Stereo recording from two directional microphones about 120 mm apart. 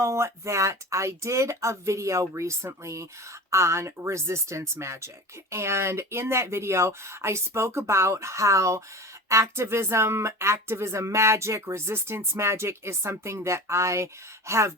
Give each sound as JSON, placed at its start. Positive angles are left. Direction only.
{"t": 0.0, "sound": "speech", "side_deg": -25}